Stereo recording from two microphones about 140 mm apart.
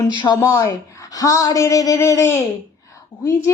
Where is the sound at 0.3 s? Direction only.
25° left (ahead or behind).